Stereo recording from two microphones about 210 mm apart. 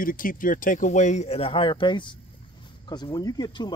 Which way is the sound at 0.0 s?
40° left (ahead or behind).